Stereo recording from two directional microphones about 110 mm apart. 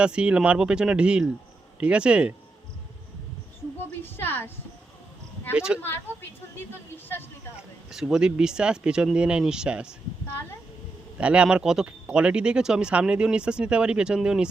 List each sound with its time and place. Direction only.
0.0 s speech: 10° right (ahead or behind)
4.0 s a woman's voice: 20° left (ahead or behind)
5.5 s speech: 10° right (ahead or behind)
6.9 s a woman's voice: 20° left (ahead or behind)
7.5 s speech: 5° right (ahead or behind)
11.2 s speech: 10° right (ahead or behind)